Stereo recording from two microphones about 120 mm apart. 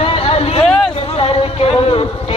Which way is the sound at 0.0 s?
55° left (ahead or behind).